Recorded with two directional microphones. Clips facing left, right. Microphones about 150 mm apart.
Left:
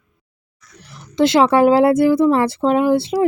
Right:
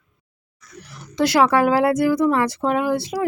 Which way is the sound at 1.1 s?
25° left (ahead or behind).